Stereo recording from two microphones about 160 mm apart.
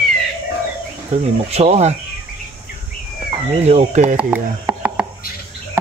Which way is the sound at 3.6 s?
40° right (ahead or behind).